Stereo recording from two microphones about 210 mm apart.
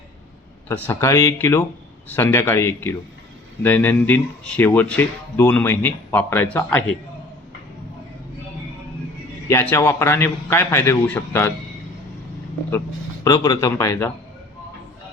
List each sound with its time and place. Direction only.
0.7 s speech: 10° left (ahead or behind)
9.5 s speech: 10° left (ahead or behind)
13.2 s speech: 15° left (ahead or behind)